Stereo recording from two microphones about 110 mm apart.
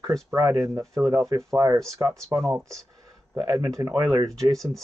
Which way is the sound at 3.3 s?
40° right (ahead or behind).